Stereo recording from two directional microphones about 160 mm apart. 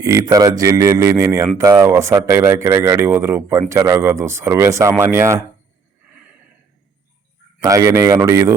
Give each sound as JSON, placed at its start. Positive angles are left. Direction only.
{"t": 0.0, "sound": "speech", "side_deg": -20}
{"t": 6.1, "sound": "a sound", "side_deg": -5}
{"t": 7.6, "sound": "speech", "side_deg": -20}